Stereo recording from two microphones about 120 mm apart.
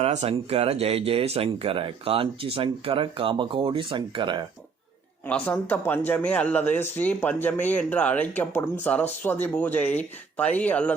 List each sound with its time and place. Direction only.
0.0 s speech: 65° right (ahead or behind); by 4.4 s 40° right (ahead or behind)
5.2 s speech: 10° left (ahead or behind)